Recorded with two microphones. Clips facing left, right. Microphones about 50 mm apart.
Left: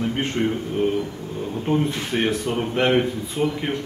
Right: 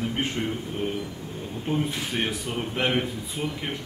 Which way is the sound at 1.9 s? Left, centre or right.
Centre.